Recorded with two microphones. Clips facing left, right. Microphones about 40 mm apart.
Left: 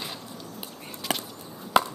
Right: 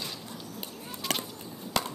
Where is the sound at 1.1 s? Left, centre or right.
Centre.